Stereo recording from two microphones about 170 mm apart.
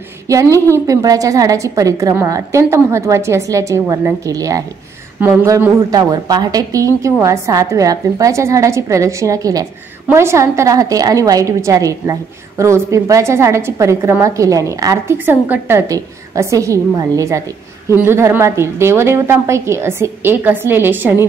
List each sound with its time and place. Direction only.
0.3 s a woman's voice: 20° right (ahead or behind)